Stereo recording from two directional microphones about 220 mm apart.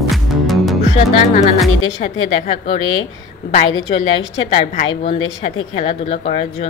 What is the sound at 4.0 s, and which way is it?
A woman's voice, 30° left (ahead or behind).